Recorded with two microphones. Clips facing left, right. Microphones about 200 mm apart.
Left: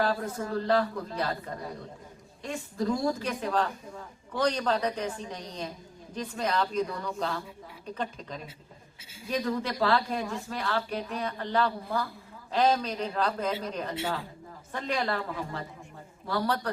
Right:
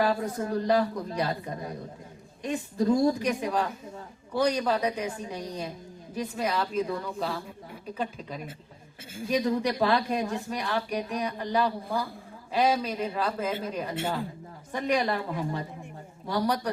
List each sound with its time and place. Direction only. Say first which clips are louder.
0.0 s speech: right 2 dB; 15° right (ahead or behind)